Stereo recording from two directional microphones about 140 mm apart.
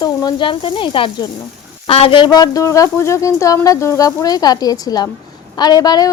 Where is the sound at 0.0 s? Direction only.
30° left (ahead or behind).